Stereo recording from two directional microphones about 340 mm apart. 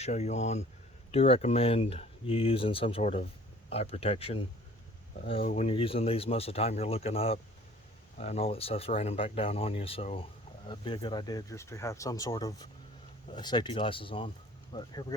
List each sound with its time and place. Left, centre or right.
0.0 s speech: centre